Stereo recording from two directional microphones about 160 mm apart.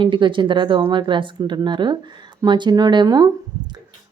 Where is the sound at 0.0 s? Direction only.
30° right (ahead or behind).